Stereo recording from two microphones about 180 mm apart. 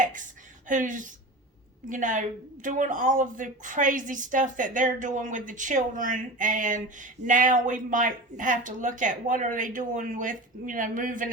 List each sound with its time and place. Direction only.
0.7 s a woman's voice: 45° right (ahead or behind)